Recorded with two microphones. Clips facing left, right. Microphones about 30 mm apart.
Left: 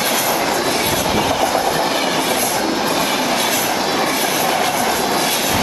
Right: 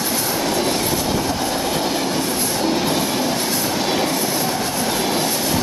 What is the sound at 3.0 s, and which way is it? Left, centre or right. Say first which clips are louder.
Train: left 3 dB; left.